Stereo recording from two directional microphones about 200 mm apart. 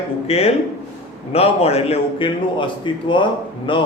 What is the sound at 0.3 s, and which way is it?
A man's voice, 30° left (ahead or behind).